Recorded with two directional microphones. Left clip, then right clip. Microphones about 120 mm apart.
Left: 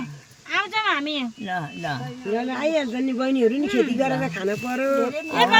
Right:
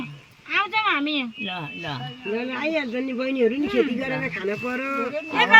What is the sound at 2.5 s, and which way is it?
Speech, 50° left (ahead or behind).